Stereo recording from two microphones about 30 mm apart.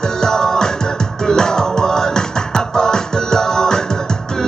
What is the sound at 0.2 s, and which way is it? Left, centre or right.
Music, centre.